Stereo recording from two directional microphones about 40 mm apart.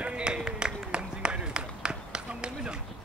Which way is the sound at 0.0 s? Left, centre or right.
Right.